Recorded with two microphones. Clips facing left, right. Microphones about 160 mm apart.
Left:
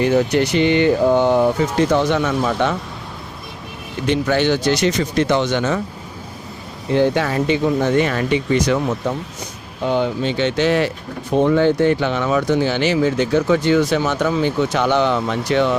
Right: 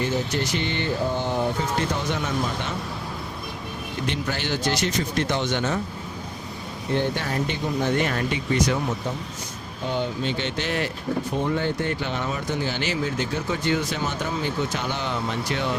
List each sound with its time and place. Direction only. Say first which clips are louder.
0.0 s speech: left 9 dB; 70° left (ahead or behind)
1.9 s speech: left 10 dB; 85° left
4.3 s speech: left 10 dB; 75° left (ahead or behind); by 5.8 s 90° left
6.9 s speech: left 8 dB; 90° left
9.8 s speech: left 8 dB; 85° left